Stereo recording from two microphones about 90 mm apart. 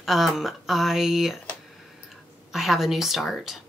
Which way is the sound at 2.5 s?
5° right (ahead or behind).